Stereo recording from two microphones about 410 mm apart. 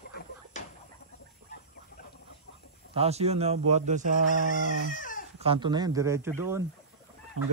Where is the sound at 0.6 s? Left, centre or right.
Centre.